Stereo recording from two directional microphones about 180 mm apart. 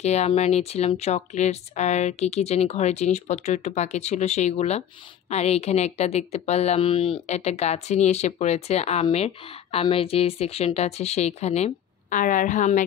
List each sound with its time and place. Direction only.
0.0 s speech: 35° left (ahead or behind)